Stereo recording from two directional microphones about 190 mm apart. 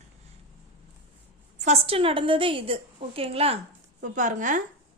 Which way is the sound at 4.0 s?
40° right (ahead or behind).